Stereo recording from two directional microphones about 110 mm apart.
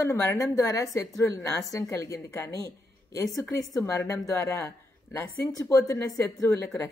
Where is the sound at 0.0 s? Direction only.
25° left (ahead or behind).